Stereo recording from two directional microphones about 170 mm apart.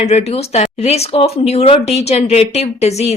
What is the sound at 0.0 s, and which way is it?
A woman's voice, 40° left (ahead or behind).